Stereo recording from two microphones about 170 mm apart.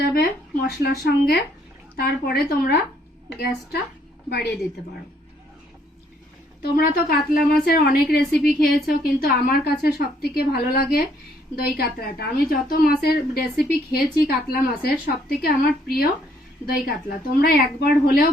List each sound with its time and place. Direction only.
0.1 s speech: 65° left (ahead or behind)
6.6 s a woman's voice: 65° left (ahead or behind)